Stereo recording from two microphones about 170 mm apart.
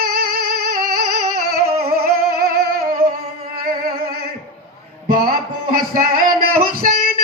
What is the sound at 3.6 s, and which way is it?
Singing, 60° right (ahead or behind).